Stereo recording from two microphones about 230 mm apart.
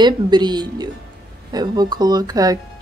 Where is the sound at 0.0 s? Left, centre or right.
Centre.